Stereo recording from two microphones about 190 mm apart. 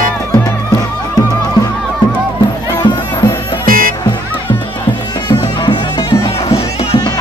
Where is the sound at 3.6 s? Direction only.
45° right (ahead or behind).